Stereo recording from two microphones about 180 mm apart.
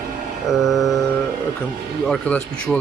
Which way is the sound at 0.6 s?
Centre (ahead or behind).